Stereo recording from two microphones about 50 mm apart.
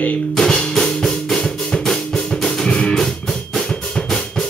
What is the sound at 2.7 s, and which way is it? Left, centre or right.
Music, centre.